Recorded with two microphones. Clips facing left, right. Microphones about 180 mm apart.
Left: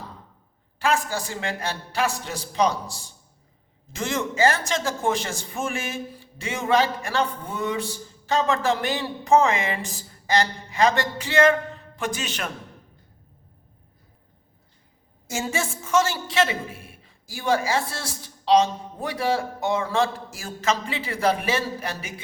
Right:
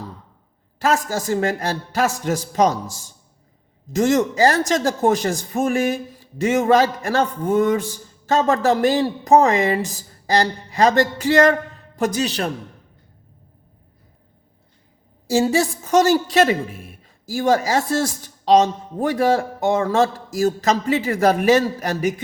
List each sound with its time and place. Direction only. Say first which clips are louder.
0.8 s a woman's voice: right 4 dB; 40° right (ahead or behind)
15.3 s a woman's voice: right 10 dB; 35° right (ahead or behind)